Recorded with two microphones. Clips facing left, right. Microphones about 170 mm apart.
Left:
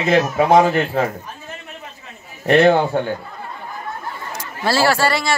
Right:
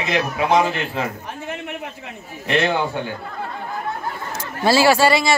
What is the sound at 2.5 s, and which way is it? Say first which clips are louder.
Speech: left 7 dB; 45° left (ahead or behind).